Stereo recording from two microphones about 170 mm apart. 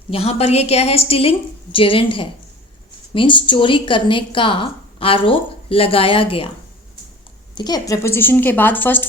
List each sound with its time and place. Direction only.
0.1 s a woman's voice: 35° left (ahead or behind)
7.5 s a woman's voice: 25° left (ahead or behind)